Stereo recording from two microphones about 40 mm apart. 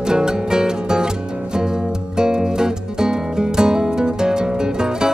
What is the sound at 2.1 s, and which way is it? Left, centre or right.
Music, centre.